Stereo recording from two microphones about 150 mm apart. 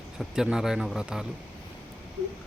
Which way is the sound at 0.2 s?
5° right (ahead or behind).